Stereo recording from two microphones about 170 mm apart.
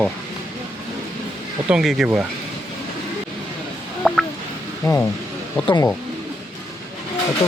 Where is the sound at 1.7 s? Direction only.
5° right (ahead or behind).